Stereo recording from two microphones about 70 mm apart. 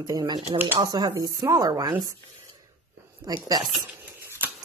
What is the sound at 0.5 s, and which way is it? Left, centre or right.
Speech, right.